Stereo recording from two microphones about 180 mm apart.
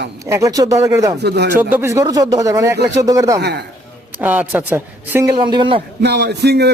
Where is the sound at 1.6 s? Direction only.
10° right (ahead or behind).